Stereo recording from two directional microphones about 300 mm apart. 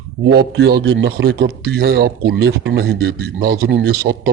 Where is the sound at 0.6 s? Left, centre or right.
Right.